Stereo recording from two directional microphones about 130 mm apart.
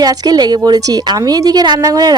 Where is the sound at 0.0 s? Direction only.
30° right (ahead or behind).